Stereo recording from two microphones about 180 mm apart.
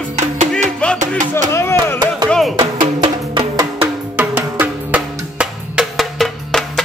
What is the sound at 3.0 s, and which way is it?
Music, 25° right (ahead or behind).